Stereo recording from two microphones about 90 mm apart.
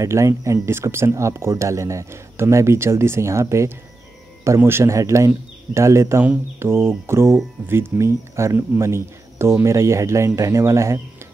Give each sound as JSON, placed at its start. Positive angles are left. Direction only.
{"t": 0.0, "sound": "speech", "side_deg": -35}